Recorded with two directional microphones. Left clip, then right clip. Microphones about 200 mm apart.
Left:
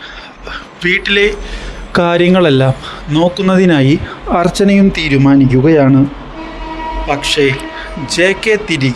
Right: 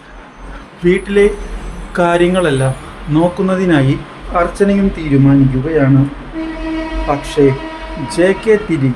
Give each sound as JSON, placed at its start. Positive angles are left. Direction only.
{"t": 0.8, "sound": "speech", "side_deg": 45}
{"t": 7.1, "sound": "speech", "side_deg": 40}